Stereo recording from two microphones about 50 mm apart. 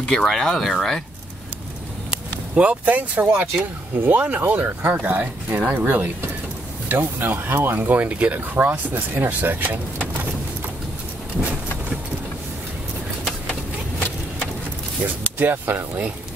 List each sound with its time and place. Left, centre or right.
0.2 s speech: centre
2.5 s speech: right
8.5 s speech: right
15.3 s speech: right